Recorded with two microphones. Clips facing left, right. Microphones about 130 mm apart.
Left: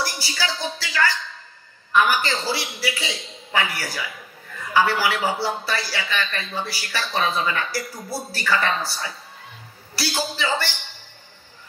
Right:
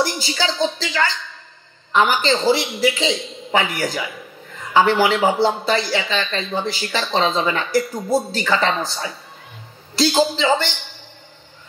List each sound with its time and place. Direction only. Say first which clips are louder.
0.0 s a man's voice: right 6 dB; 20° right (ahead or behind)